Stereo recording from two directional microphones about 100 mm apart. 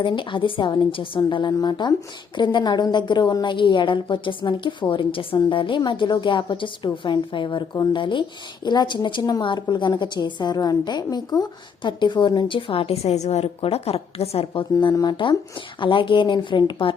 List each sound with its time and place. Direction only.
0.0 s a woman's voice: 55° left (ahead or behind)